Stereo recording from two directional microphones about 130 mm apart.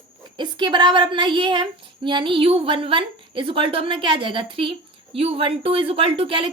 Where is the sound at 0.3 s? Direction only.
35° right (ahead or behind).